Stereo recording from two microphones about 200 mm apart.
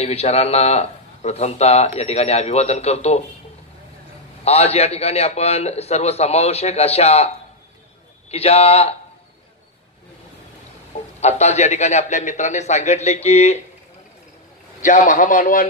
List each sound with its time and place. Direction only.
0.0 s a man's voice: 30° left (ahead or behind)
4.5 s a man's voice: 30° left (ahead or behind)
8.3 s a man's voice: 30° left (ahead or behind)
11.1 s a man's voice: 35° left (ahead or behind)
14.8 s a man's voice: 40° left (ahead or behind)